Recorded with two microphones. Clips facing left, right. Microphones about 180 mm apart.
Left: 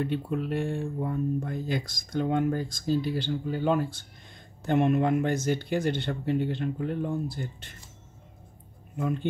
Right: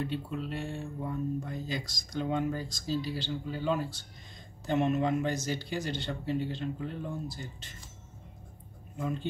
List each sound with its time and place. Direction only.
0.0 s speech: 55° left (ahead or behind)
8.9 s speech: 55° left (ahead or behind)